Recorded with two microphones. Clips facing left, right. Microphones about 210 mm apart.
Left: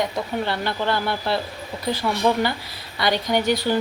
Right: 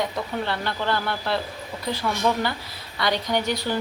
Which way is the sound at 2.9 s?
20° left (ahead or behind).